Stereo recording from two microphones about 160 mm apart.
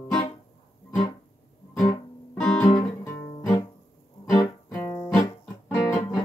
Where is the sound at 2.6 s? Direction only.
15° left (ahead or behind).